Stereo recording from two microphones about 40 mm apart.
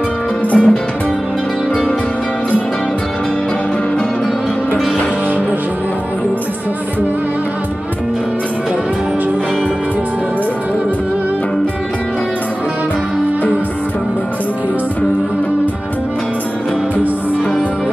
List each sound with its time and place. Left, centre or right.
0.5 s music: left